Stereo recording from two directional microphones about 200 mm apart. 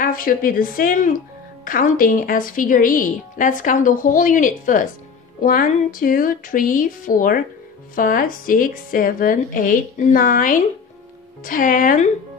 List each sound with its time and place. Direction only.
0.0 s speech: 45° left (ahead or behind)